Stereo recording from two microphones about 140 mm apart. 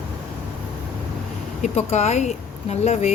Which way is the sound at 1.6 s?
55° left (ahead or behind).